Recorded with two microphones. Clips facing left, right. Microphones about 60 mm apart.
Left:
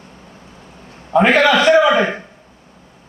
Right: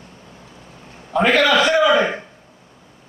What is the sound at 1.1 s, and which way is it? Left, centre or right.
Speech, left.